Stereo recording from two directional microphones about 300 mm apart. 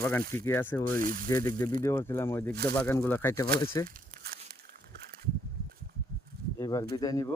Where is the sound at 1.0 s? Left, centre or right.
Right.